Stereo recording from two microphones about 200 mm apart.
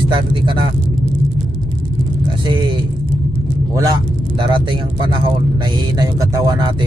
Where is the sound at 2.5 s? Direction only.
25° right (ahead or behind).